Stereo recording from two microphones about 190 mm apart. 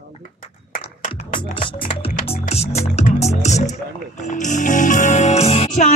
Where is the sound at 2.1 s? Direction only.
35° left (ahead or behind).